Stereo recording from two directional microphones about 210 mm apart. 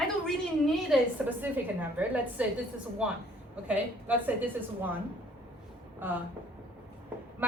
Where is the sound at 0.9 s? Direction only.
Centre (ahead or behind).